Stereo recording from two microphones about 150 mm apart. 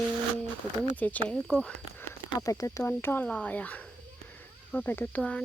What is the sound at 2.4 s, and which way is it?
Speech, 20° left (ahead or behind).